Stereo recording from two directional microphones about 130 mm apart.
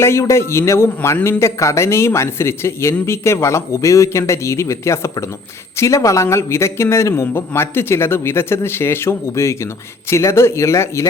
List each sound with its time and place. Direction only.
0.0 s a man's voice: 20° left (ahead or behind)